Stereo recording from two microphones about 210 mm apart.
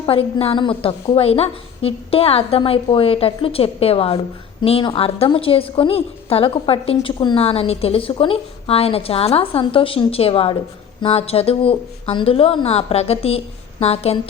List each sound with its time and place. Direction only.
0.0 s a woman's voice: 25° left (ahead or behind)